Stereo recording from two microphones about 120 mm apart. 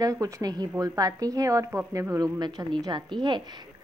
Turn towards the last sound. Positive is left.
turn(degrees=-40)  # may be behind; listen again after turning